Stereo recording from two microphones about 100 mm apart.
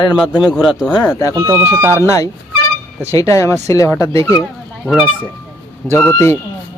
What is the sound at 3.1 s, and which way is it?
Speech, 30° left (ahead or behind).